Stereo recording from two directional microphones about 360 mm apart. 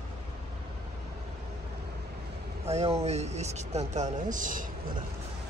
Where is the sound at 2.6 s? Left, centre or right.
Centre.